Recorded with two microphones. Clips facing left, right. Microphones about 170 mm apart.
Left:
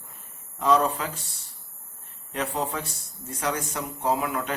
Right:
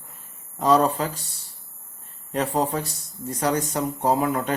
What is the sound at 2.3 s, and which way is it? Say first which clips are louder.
A man's voice: right 5 dB; 35° right (ahead or behind).